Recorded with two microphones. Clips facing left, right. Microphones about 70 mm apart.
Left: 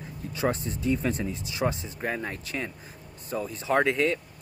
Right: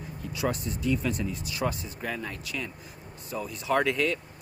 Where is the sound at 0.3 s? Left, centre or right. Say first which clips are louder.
Left 2 dB; left.